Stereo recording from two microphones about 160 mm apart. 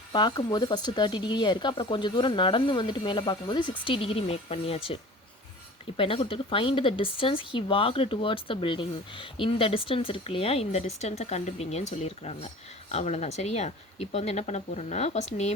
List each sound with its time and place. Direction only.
0.1 s speech: 25° left (ahead or behind)
6.0 s speech: 35° left (ahead or behind)